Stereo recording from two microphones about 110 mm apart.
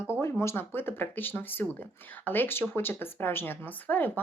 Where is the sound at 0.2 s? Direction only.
25° left (ahead or behind).